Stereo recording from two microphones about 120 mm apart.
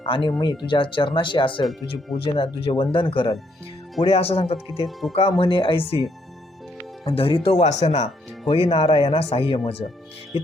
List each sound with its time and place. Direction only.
0.0 s speech: 45° left (ahead or behind)
5.4 s speech: 45° left (ahead or behind)
7.6 s speech: 70° left (ahead or behind); by 10.5 s 55° left (ahead or behind)